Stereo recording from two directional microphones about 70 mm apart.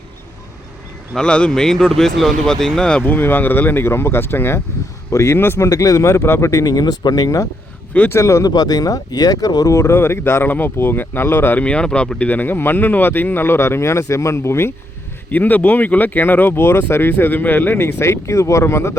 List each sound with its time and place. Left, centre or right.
1.1 s speech: centre; by 5.5 s left
5.5 s speech: left
8.4 s speech: left
9.7 s speech: left
11.6 s speech: centre; by 14.7 s left
15.3 s speech: left